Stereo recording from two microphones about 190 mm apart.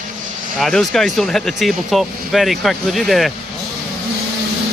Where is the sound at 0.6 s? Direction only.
Centre (ahead or behind).